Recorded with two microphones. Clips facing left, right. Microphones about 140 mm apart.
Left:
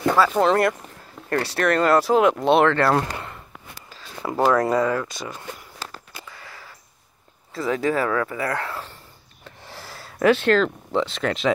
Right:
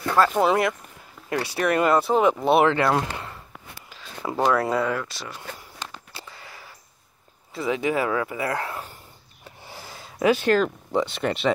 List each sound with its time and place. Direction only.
0.1 s speech: centre (ahead or behind)
4.2 s speech: centre (ahead or behind)
6.1 s a sound: 25° right (ahead or behind)
7.5 s speech: 20° right (ahead or behind)
10.2 s speech: 5° right (ahead or behind)